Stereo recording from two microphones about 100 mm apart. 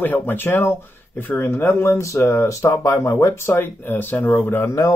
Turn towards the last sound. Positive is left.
turn(degrees=20)  # may be behind; listen again after turning